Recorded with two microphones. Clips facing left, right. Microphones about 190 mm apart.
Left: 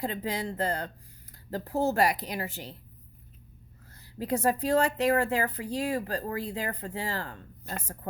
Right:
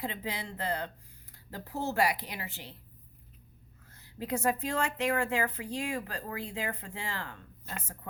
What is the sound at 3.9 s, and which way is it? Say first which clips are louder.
A woman's voice: left 4 dB; 35° left (ahead or behind).